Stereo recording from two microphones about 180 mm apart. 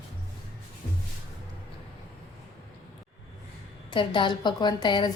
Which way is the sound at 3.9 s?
25° left (ahead or behind).